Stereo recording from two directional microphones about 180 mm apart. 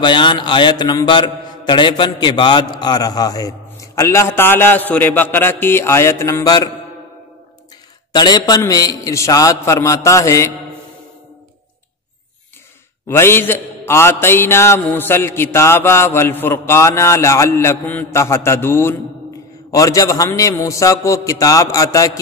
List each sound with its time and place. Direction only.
0.0 s a man's voice: 25° left (ahead or behind)
8.1 s a man's voice: 25° left (ahead or behind)
13.1 s a man's voice: 15° left (ahead or behind)